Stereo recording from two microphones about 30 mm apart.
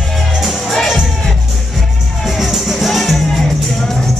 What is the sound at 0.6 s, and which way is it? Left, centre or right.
Music, centre.